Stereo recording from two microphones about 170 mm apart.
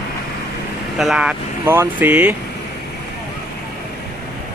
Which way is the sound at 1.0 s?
5° right (ahead or behind).